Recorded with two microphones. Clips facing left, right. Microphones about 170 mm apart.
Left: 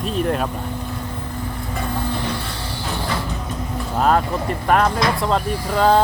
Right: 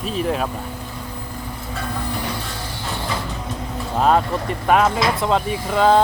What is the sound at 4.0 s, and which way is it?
Speech, centre (ahead or behind).